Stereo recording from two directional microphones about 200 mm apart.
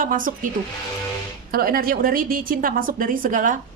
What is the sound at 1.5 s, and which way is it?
A woman's voice, 50° right (ahead or behind).